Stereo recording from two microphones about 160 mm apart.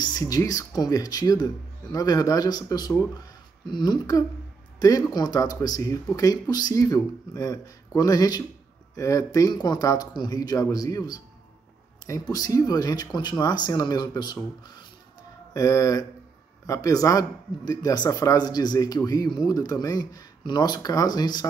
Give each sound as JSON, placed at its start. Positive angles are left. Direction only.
{"t": 0.0, "sound": "speech", "side_deg": 25}